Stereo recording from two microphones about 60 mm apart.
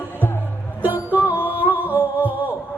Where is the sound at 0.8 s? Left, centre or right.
Right.